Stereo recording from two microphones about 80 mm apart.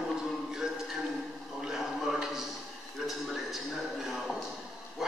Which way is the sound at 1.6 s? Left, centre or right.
Centre.